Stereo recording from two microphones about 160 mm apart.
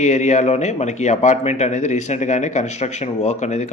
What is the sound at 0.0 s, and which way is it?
A man's voice, 45° left (ahead or behind).